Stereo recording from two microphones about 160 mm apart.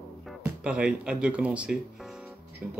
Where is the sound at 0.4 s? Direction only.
5° right (ahead or behind).